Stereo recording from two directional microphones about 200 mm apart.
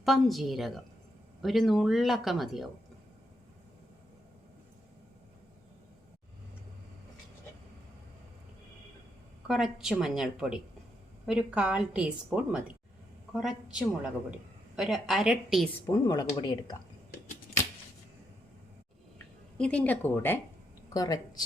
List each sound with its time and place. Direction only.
0.0 s a woman's voice: centre (ahead or behind)
9.5 s a woman's voice: centre (ahead or behind)
15.9 s speech: 20° left (ahead or behind)
19.5 s a woman's voice: 5° left (ahead or behind)